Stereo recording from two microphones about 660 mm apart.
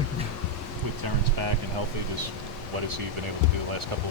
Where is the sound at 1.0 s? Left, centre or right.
Right.